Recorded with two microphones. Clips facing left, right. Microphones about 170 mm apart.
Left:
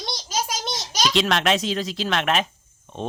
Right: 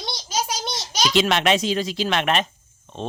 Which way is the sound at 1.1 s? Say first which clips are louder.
Right 2 dB; centre (ahead or behind).